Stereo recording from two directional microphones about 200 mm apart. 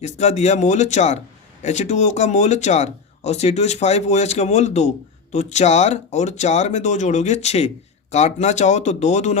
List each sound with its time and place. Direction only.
0.0 s speech: 35° left (ahead or behind)